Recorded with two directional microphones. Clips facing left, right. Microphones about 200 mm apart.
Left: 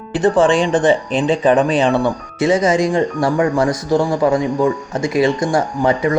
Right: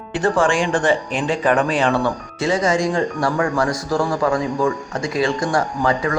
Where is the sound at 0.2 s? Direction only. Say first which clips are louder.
Left 5 dB; 20° left (ahead or behind).